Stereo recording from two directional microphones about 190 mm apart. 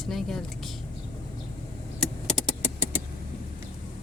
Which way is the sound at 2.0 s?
Centre (ahead or behind).